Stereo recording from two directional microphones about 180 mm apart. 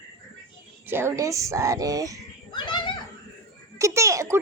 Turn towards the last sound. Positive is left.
turn(degrees=-15)  # may be behind; listen again after turning